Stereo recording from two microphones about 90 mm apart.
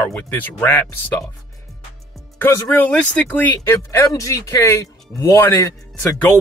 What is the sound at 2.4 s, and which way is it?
Speech, 20° left (ahead or behind).